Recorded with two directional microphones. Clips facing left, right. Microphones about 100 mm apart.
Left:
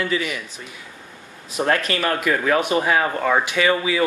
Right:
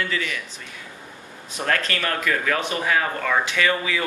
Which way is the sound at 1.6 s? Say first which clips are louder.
Left 4 dB; 20° left (ahead or behind).